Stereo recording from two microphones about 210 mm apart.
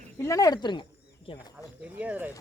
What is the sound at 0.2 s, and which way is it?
Speech, 15° left (ahead or behind).